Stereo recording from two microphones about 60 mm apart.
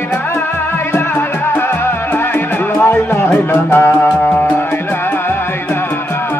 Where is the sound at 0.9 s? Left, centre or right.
Left.